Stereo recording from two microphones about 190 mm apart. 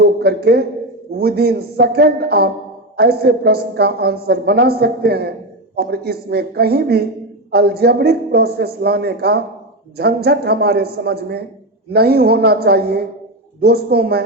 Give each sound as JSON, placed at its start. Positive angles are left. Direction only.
{"t": 0.0, "sound": "a man's voice", "side_deg": -55}